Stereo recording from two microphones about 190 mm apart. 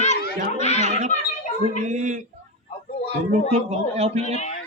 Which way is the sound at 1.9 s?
40° right (ahead or behind).